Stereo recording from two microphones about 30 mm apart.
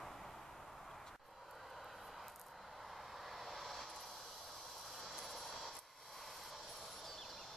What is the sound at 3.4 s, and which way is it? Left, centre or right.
Vehicle, centre.